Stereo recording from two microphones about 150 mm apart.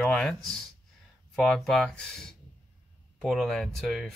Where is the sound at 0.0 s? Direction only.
5° left (ahead or behind).